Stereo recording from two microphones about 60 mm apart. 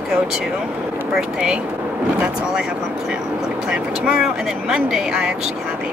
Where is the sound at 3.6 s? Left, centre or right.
Centre.